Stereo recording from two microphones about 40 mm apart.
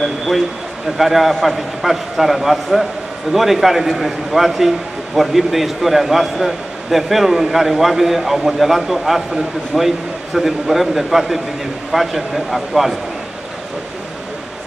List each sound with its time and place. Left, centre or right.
0.9 s a man's voice: centre